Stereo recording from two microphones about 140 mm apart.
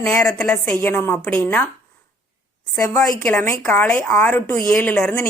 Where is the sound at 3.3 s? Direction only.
15° left (ahead or behind).